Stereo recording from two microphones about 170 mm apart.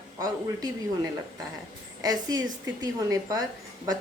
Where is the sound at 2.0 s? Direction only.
20° right (ahead or behind).